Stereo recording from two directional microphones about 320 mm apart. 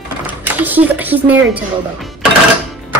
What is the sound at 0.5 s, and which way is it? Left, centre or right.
Speech, centre.